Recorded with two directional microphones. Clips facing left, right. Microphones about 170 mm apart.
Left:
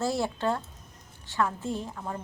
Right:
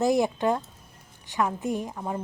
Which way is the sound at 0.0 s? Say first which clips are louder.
Right 5 dB; 15° right (ahead or behind).